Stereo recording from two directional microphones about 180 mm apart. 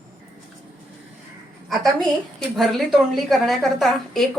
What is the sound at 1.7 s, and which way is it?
A woman's voice, centre (ahead or behind).